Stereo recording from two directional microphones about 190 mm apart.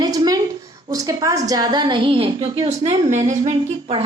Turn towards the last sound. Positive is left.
turn(degrees=-35)  # may be behind; listen again after turning